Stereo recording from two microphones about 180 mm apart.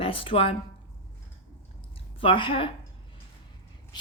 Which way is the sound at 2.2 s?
30° left (ahead or behind).